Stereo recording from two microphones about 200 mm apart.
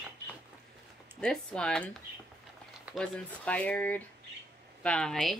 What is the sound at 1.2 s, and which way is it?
Speech, 5° left (ahead or behind).